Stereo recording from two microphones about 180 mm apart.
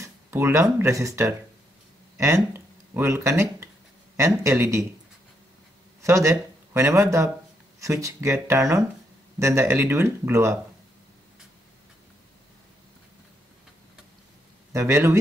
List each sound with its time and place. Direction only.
0.0 s speech: 15° right (ahead or behind)
6.0 s speech: 15° right (ahead or behind)
14.7 s speech: 15° right (ahead or behind)